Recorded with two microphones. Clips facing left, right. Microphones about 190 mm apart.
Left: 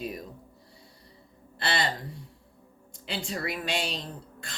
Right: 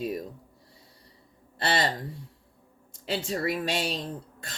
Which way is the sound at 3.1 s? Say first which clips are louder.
Right 5 dB; 40° right (ahead or behind).